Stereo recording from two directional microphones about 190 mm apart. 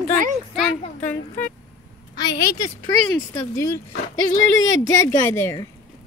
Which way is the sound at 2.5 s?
20° left (ahead or behind).